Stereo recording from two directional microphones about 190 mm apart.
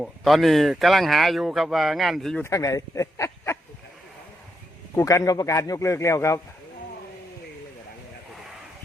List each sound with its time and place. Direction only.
0.0 s speech: centre (ahead or behind)
2.4 s speech: 15° left (ahead or behind)
4.9 s speech: 15° left (ahead or behind)